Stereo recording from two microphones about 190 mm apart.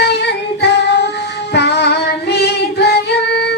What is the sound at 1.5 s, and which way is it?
Female singing, 60° left (ahead or behind).